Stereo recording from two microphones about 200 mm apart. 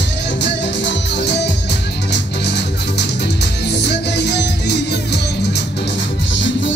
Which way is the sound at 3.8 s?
55° left (ahead or behind).